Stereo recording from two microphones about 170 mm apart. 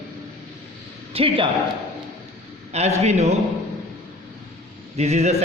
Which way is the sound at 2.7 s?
40° right (ahead or behind).